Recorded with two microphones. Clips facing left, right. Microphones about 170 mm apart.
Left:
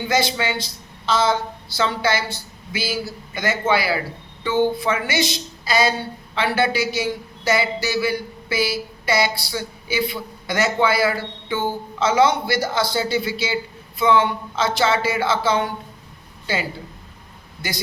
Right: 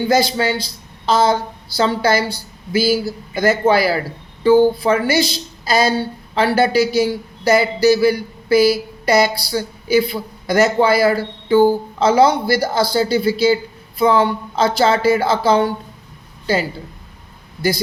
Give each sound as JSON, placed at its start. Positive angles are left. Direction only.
{"t": 0.1, "sound": "a woman's voice", "side_deg": -40}